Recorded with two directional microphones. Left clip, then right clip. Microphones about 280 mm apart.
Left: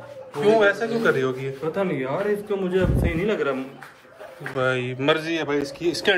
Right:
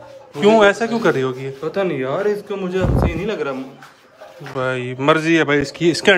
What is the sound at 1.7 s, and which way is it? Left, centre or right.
A man's voice, right.